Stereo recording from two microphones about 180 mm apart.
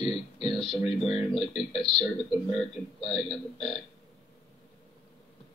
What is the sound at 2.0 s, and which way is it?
Speech, 30° left (ahead or behind).